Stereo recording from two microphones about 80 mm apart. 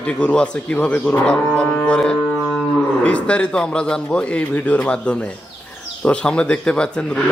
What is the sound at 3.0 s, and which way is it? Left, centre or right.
A man's voice, centre.